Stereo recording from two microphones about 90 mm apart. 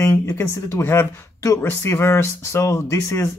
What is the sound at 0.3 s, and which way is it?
Speech, 35° left (ahead or behind).